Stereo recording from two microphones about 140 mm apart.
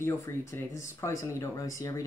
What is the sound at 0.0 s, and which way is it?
Speech, 20° left (ahead or behind).